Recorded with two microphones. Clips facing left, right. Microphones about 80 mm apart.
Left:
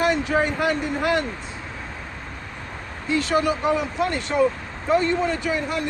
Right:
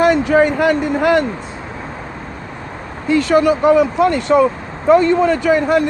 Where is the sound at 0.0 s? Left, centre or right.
Right.